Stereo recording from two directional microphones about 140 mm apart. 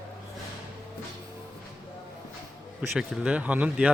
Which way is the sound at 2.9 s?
5° right (ahead or behind).